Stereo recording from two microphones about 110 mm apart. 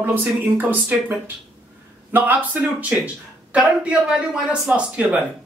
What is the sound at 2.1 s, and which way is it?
A woman's voice, 15° right (ahead or behind).